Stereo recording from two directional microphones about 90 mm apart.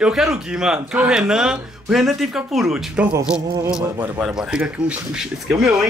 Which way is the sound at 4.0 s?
15° right (ahead or behind).